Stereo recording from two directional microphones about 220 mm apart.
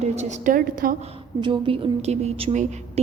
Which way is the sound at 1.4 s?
20° right (ahead or behind).